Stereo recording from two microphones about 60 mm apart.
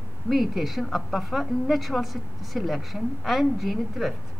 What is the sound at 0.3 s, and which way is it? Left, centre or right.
A woman's voice, centre.